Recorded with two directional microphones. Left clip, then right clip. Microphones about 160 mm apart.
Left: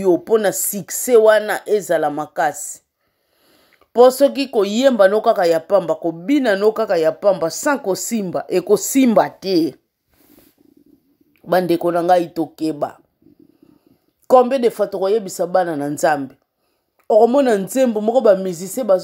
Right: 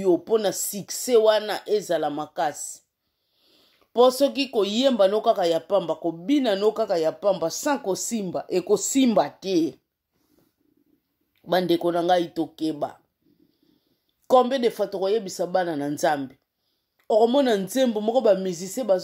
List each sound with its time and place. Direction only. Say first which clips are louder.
0.0 s speech: left 6 dB; 20° left (ahead or behind)
3.4 s speech: left 6 dB; 15° left (ahead or behind)
11.4 s speech: left 6 dB; 30° left (ahead or behind)
14.2 s speech: left 6 dB; 25° left (ahead or behind)